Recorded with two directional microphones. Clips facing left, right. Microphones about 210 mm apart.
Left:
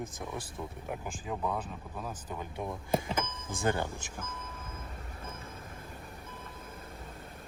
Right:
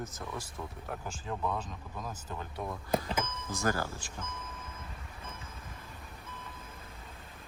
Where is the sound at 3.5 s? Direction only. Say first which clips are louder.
Left 2 dB; 30° left (ahead or behind).